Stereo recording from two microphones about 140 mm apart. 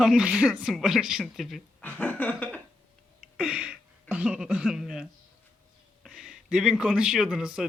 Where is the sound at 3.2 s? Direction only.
5° right (ahead or behind).